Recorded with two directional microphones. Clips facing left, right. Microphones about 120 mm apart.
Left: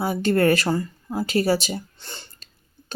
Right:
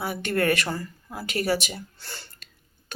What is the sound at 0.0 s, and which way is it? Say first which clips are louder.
Speech: left 6 dB; 30° left (ahead or behind).